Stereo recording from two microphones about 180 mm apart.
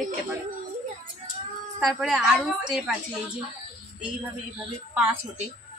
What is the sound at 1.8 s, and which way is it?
Speech, centre (ahead or behind).